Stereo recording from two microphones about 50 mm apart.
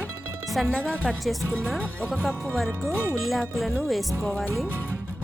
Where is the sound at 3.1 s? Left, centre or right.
Centre.